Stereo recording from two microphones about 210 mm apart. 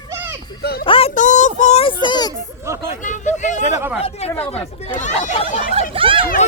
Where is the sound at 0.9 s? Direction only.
25° left (ahead or behind).